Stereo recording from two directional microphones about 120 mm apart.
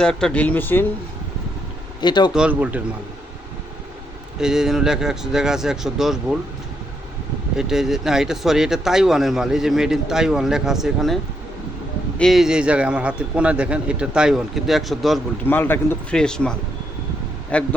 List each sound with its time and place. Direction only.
0.0 s speech: 5° left (ahead or behind)
2.0 s speech: 40° left (ahead or behind)
2.3 s a man's voice: 10° right (ahead or behind)
4.4 s speech: 5° right (ahead or behind)
7.5 s a man's voice: 5° right (ahead or behind)
15.4 s speech: 15° left (ahead or behind)
16.1 s speech: 5° left (ahead or behind)